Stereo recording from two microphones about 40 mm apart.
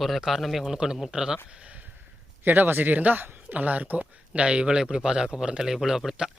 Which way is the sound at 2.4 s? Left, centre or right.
Right.